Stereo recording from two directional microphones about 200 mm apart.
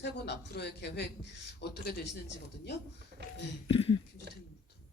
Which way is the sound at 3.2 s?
55° right (ahead or behind).